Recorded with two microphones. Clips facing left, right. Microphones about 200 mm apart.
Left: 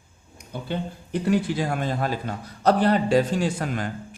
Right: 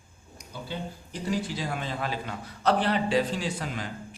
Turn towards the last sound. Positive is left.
turn(degrees=50)  # may be behind; listen again after turning